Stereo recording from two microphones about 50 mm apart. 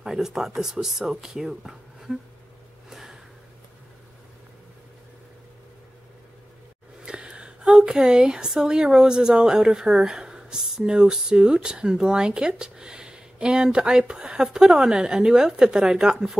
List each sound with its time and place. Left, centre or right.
0.0 s a woman's voice: centre
2.9 s a sound: centre
7.1 s a woman's voice: centre